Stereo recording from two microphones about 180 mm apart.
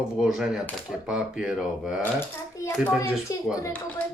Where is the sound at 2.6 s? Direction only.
15° left (ahead or behind).